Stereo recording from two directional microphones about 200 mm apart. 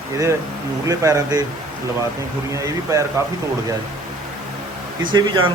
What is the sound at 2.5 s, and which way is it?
Speech, 15° right (ahead or behind).